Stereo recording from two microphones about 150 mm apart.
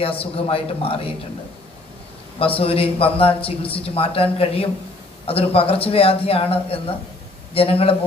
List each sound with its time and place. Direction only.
0.0 s speech: 40° left (ahead or behind)
2.6 s speech: 40° left (ahead or behind)